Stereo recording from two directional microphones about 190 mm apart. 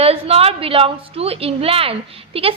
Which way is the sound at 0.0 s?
30° right (ahead or behind).